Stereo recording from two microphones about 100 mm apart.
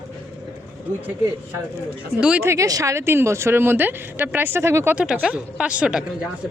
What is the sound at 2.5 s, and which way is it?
Speech, 35° right (ahead or behind).